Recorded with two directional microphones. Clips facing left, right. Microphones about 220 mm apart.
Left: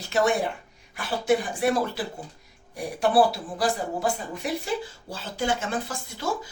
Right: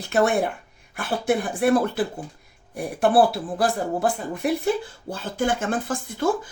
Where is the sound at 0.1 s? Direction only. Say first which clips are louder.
Right 3 dB; 55° right (ahead or behind).